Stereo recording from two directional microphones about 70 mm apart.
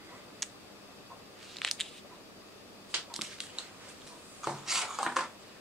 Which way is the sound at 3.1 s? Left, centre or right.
Centre.